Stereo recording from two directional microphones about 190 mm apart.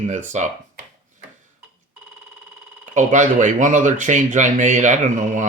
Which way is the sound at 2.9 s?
40° right (ahead or behind).